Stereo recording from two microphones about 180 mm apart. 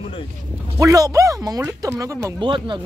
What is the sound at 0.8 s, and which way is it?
Speech, 20° right (ahead or behind).